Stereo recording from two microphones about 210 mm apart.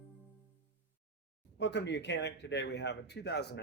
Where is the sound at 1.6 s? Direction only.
55° left (ahead or behind).